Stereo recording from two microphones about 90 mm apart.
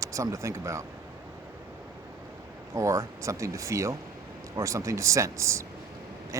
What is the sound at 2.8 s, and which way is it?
Speech, 35° right (ahead or behind).